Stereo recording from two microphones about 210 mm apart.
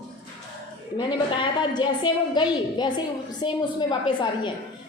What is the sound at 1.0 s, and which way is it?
A woman's voice, 20° left (ahead or behind).